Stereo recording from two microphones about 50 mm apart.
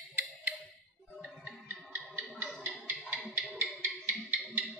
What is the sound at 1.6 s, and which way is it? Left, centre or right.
Music, right.